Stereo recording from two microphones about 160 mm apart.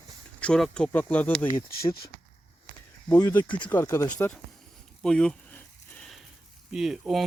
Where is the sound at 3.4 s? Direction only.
30° left (ahead or behind).